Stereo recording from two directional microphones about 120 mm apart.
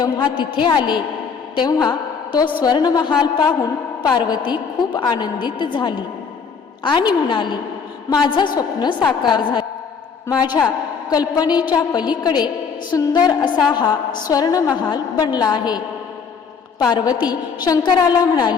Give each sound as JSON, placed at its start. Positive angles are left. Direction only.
{"t": 0.0, "sound": "a woman's voice", "side_deg": 40}
{"t": 11.1, "sound": "a woman's voice", "side_deg": 35}